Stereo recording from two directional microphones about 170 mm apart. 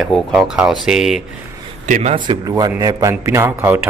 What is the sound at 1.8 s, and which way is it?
Speech, 45° right (ahead or behind).